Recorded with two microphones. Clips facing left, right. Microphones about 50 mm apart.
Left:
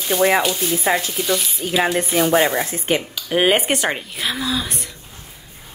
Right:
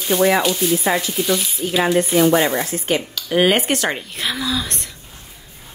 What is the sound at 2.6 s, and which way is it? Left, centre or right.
Speech, left.